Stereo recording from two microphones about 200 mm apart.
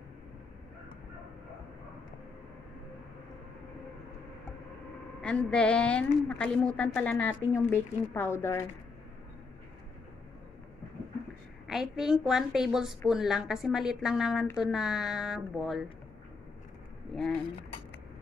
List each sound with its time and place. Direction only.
5.2 s a woman's voice: 5° left (ahead or behind)
11.6 s a woman's voice: centre (ahead or behind)